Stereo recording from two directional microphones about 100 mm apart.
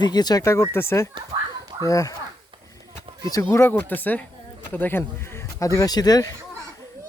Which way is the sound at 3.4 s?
25° left (ahead or behind).